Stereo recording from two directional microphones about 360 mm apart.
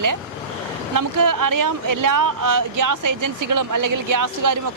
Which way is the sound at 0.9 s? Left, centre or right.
Right.